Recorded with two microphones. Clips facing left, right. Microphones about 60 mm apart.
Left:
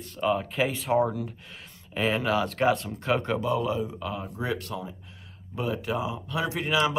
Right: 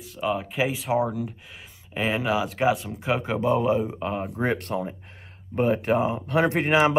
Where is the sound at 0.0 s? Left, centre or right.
Centre.